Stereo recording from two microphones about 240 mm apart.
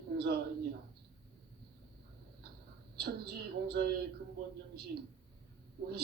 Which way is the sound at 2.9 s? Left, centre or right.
Right.